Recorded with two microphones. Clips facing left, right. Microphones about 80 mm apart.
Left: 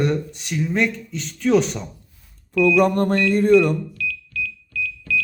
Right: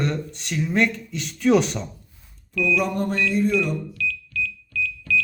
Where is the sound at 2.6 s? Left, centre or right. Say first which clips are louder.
Left 6 dB; left.